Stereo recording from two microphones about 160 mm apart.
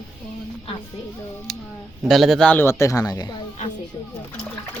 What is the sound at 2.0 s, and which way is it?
Speech, centre (ahead or behind).